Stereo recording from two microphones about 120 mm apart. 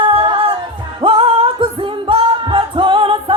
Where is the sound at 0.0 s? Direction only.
45° right (ahead or behind).